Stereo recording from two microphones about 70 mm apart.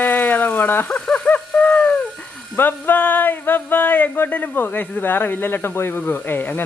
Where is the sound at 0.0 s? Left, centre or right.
Left.